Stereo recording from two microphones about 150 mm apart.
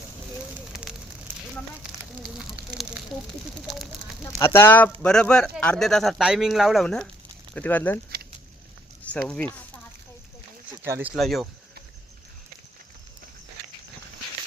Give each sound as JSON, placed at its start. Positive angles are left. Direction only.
{"t": 0.7, "sound": "fire", "side_deg": -5}
{"t": 2.5, "sound": "speech", "side_deg": -5}
{"t": 4.2, "sound": "speech", "side_deg": 15}
{"t": 9.1, "sound": "speech", "side_deg": 5}
{"t": 10.8, "sound": "speech", "side_deg": -15}
{"t": 11.1, "sound": "speech", "side_deg": 0}